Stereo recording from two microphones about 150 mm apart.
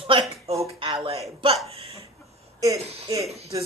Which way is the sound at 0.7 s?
45° right (ahead or behind).